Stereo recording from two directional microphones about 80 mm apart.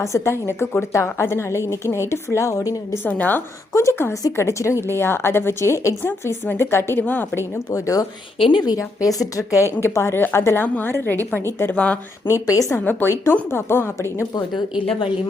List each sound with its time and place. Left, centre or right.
0.0 s a woman's voice: left
3.0 s a woman's voice: centre
3.8 s a woman's voice: left
7.0 s a woman's voice: centre
7.7 s a woman's voice: left
8.4 s speech: left
8.8 s a woman's voice: left
11.8 s speech: centre
12.3 s a woman's voice: left
12.8 s a woman's voice: left
14.3 s speech: left